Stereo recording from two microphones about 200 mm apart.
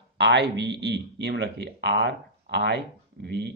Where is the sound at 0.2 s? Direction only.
60° right (ahead or behind).